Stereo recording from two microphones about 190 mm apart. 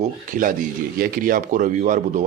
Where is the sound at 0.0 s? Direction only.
45° right (ahead or behind).